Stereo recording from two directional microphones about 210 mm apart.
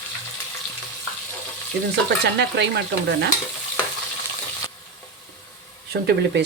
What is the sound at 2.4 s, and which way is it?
Speech, 55° right (ahead or behind).